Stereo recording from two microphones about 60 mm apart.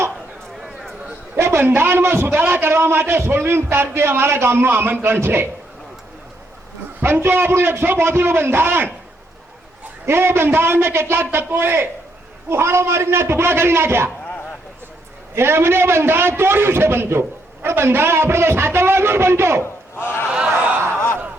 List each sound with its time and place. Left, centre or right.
1.4 s a man's voice: right
7.0 s a man's voice: right
10.1 s a man's voice: right
15.4 s a man's voice: right